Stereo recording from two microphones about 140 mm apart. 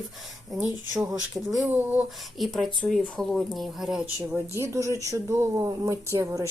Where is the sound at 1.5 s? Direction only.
15° right (ahead or behind).